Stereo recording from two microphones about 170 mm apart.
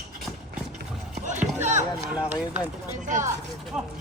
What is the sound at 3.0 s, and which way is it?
Speech, 45° right (ahead or behind).